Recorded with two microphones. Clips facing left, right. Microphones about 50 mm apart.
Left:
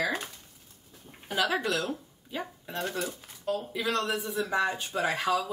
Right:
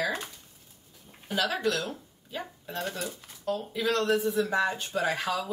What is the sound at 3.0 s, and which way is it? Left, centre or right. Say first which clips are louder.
Speech: left 2 dB; left.